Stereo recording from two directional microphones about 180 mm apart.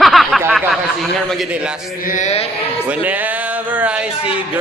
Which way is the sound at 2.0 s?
45° left (ahead or behind).